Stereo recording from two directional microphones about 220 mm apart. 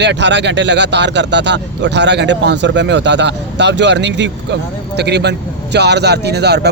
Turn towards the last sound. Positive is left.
turn(degrees=-50)  # may be behind; listen again after turning